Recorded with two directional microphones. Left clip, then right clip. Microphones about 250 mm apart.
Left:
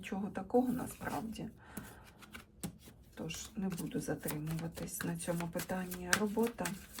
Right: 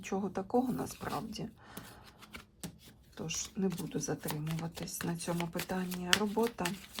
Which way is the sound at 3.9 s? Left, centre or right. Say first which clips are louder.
Right 2 dB; centre.